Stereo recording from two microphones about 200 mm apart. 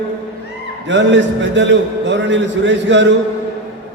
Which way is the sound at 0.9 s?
65° right (ahead or behind).